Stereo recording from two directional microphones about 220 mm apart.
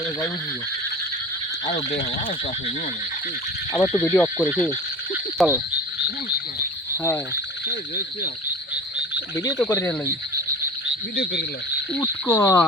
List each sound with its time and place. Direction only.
1.6 s speech: 30° left (ahead or behind)
3.7 s speech: 15° left (ahead or behind)
5.4 s frog: 5° right (ahead or behind)
6.9 s speech: 15° left (ahead or behind)
7.7 s speech: 40° left (ahead or behind)
9.3 s speech: 15° left (ahead or behind)
10.8 s speech: 45° left (ahead or behind)
11.9 s speech: 10° left (ahead or behind)